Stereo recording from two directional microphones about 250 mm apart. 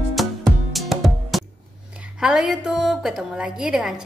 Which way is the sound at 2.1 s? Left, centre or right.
Centre.